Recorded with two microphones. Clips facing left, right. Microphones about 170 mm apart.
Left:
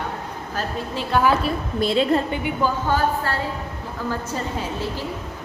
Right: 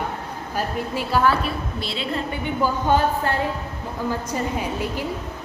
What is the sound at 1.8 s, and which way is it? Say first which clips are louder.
Speech: left 11 dB; 45° left (ahead or behind).